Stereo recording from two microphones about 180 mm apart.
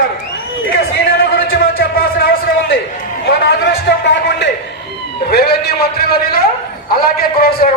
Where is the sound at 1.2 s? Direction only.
60° left (ahead or behind).